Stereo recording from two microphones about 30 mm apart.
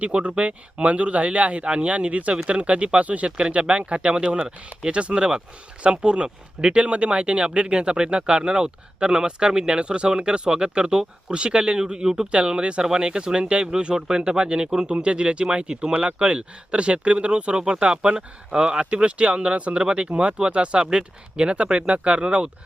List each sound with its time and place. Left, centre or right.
0.0 s speech: right
3.2 s speech: right
12.3 s speech: right
15.4 s speech: right